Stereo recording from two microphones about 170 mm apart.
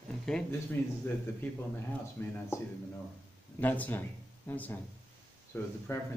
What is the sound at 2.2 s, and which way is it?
Speech, 15° left (ahead or behind).